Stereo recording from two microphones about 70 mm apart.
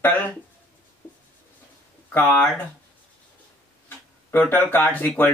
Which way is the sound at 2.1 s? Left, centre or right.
Left.